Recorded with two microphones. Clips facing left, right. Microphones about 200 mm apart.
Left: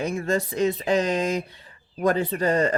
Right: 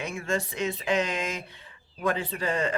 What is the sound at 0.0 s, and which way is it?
Speech, 35° left (ahead or behind).